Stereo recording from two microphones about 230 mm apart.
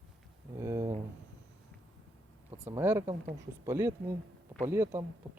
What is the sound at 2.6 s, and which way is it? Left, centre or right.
Speech, centre.